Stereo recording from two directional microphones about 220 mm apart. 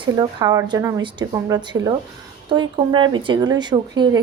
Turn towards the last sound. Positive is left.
turn(degrees=-20)  # may be behind; listen again after turning